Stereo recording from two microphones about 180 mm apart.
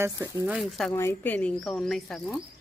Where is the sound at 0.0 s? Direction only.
15° right (ahead or behind).